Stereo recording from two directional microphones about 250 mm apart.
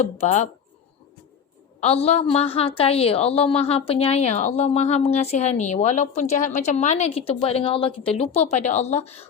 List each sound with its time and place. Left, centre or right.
0.0 s a woman's voice: left
1.8 s a woman's voice: left